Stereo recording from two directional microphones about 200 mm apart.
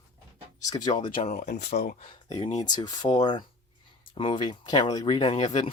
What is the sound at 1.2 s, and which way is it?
Speech, 40° left (ahead or behind).